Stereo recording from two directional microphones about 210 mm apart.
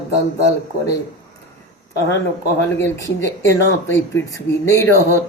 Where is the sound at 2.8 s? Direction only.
10° left (ahead or behind).